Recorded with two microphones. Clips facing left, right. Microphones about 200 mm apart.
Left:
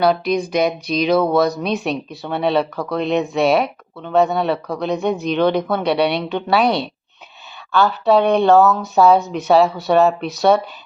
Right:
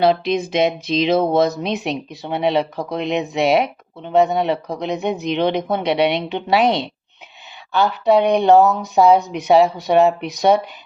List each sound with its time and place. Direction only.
0.0 s speech: 25° right (ahead or behind)